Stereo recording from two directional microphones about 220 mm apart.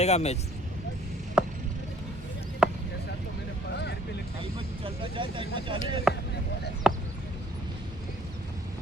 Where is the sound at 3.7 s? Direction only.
50° left (ahead or behind).